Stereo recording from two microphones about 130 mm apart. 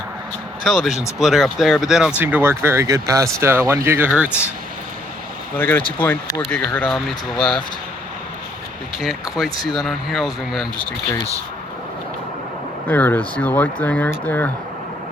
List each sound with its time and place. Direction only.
0.6 s speech: 5° left (ahead or behind)
5.5 s speech: 15° left (ahead or behind)
9.0 s speech: centre (ahead or behind)
12.9 s speech: 15° left (ahead or behind)